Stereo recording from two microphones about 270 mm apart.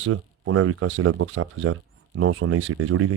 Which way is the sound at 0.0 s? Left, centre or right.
Right.